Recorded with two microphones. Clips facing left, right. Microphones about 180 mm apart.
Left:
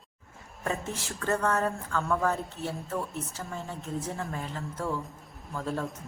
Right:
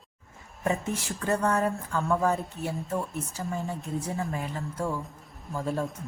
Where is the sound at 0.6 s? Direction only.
15° right (ahead or behind).